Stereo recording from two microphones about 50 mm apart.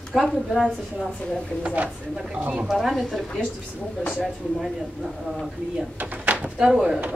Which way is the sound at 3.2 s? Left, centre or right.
Centre.